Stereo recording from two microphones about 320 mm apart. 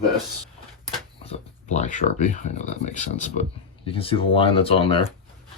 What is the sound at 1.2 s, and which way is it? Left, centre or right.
Speech, centre.